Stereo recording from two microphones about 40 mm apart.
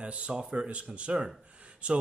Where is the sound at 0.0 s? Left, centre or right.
Right.